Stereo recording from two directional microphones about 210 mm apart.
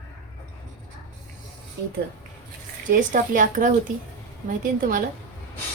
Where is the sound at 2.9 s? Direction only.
40° right (ahead or behind).